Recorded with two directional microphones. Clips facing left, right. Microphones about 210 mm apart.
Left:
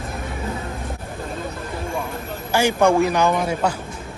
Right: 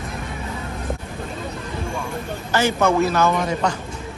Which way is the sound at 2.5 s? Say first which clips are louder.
Left 2 dB; 10° left (ahead or behind).